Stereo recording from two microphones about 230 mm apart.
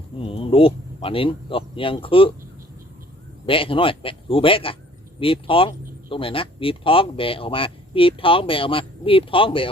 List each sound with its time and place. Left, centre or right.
0.3 s speech: left
3.4 s speech: left